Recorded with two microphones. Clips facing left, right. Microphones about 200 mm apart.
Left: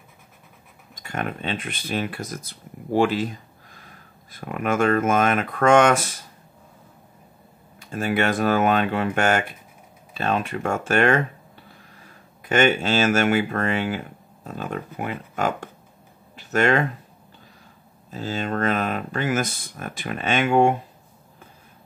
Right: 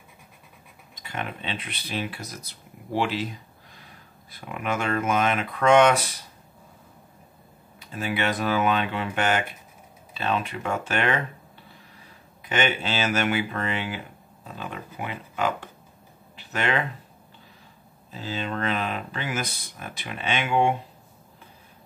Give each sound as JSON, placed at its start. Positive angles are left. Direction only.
{"t": 0.9, "sound": "speech", "side_deg": 45}
{"t": 4.3, "sound": "speech", "side_deg": 50}
{"t": 7.8, "sound": "speech", "side_deg": 45}
{"t": 12.4, "sound": "speech", "side_deg": 45}
{"t": 16.3, "sound": "a sound", "side_deg": 45}
{"t": 18.1, "sound": "speech", "side_deg": 45}